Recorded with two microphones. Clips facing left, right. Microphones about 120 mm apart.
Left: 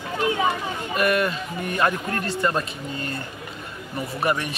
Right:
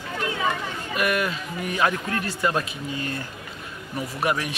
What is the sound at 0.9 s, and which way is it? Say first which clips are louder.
A man's voice: left 3 dB; centre (ahead or behind).